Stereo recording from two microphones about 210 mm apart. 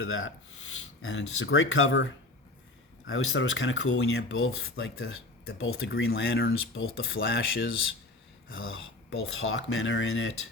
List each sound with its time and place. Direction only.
0.0 s speech: 70° left (ahead or behind)
3.1 s speech: 70° left (ahead or behind)
6.1 s speech: 55° left (ahead or behind)
8.4 s speech: 75° left (ahead or behind)